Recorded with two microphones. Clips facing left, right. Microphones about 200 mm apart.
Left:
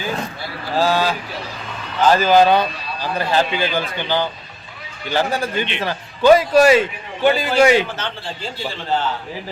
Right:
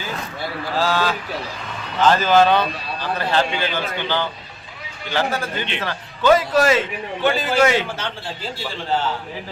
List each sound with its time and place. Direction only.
0.8 s speech: 15° left (ahead or behind)